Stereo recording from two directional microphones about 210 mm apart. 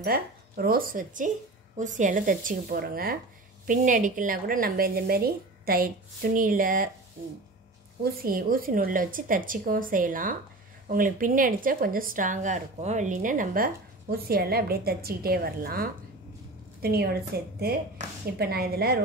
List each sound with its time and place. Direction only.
0.0 s a woman's voice: 45° right (ahead or behind)
8.0 s a woman's voice: 45° right (ahead or behind)
18.0 s a woman's voice: 35° right (ahead or behind)
18.4 s speech: 50° right (ahead or behind)